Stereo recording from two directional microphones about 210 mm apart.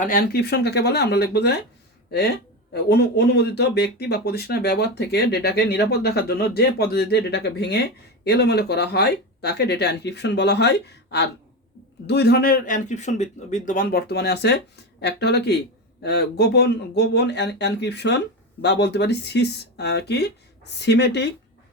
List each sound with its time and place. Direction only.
0.0 s speech: 45° left (ahead or behind)